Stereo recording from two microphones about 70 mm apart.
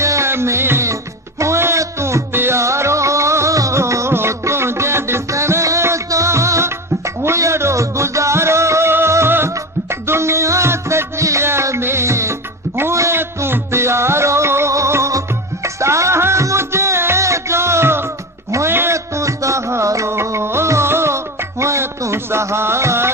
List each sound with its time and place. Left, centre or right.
0.0 s music: right
18.9 s music: right